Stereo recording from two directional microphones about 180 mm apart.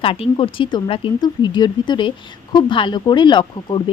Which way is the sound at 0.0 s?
30° left (ahead or behind).